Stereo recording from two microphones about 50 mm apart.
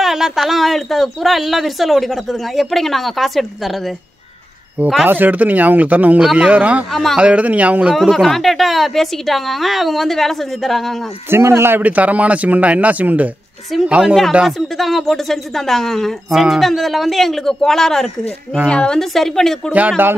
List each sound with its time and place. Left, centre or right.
0.0 s a woman's voice: centre
5.0 s a man's voice: right
6.9 s a woman's voice: centre
7.2 s a man's voice: right
7.9 s a woman's voice: centre
11.2 s a man's voice: right
11.8 s speech: right
13.8 s a man's voice: right
14.4 s a woman's voice: centre
16.3 s a woman's voice: centre
18.9 s speech: centre